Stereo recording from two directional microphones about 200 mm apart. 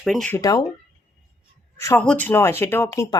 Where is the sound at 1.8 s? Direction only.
10° left (ahead or behind).